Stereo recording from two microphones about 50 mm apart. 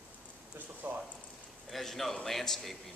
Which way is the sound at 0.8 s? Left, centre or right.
Right.